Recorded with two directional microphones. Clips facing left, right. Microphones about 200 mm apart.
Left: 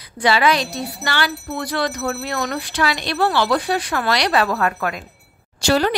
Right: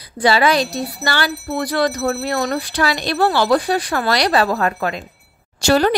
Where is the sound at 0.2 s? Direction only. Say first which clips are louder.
Right 2 dB; 35° right (ahead or behind).